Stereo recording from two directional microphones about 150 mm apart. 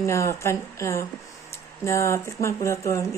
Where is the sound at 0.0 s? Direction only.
20° left (ahead or behind).